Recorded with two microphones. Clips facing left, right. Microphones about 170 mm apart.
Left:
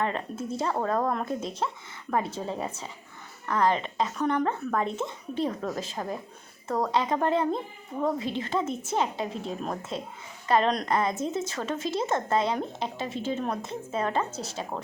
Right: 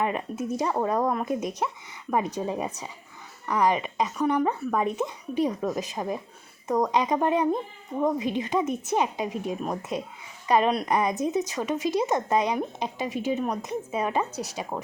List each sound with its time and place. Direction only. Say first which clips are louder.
0.0 s speech: right 2 dB; 15° right (ahead or behind)